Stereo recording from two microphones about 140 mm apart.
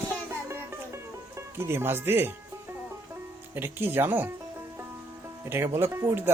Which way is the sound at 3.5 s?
15° right (ahead or behind).